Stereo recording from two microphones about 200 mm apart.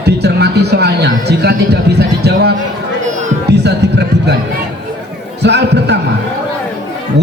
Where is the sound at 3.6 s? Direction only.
55° right (ahead or behind).